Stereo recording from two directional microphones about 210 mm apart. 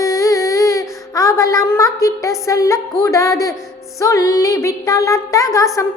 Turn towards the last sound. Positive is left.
turn(degrees=15)  # may be behind; listen again after turning